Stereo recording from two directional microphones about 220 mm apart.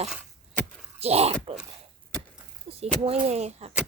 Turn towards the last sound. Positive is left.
turn(degrees=-30)  # may be behind; listen again after turning